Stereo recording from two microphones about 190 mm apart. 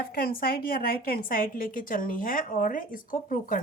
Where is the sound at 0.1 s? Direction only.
50° left (ahead or behind).